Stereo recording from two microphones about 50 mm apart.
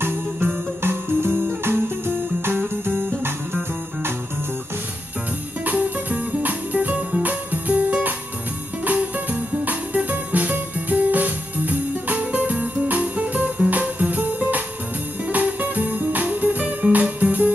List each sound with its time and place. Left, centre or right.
0.8 s music: right
2.9 s music: left
5.7 s music: right